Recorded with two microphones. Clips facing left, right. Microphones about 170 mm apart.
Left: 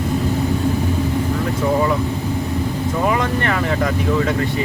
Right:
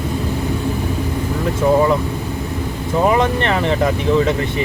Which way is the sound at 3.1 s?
25° right (ahead or behind).